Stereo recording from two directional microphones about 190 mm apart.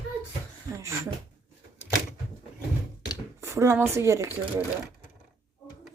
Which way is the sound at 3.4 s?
15° right (ahead or behind).